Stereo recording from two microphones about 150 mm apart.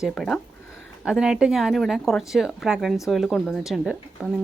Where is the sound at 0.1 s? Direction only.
5° left (ahead or behind).